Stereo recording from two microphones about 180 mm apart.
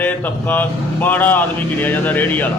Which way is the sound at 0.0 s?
10° left (ahead or behind).